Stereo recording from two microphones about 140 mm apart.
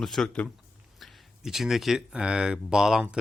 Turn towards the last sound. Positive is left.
turn(degrees=-5)  # may be behind; listen again after turning